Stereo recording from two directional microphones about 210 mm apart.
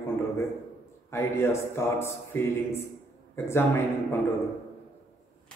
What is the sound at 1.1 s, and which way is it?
A man's voice, 15° left (ahead or behind).